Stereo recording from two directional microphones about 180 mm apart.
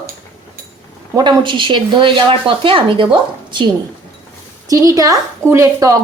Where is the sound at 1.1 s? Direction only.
25° right (ahead or behind).